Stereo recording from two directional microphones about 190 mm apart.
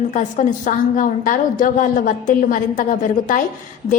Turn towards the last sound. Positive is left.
turn(degrees=45)  # may be behind; listen again after turning